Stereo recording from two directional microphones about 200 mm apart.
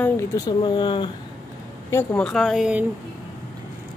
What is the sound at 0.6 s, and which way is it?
Speech, 25° left (ahead or behind).